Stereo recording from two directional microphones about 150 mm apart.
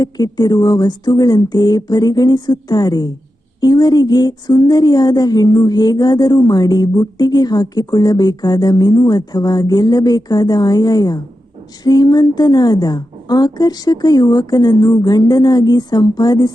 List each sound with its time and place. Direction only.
0.0 s a woman's voice: 25° left (ahead or behind)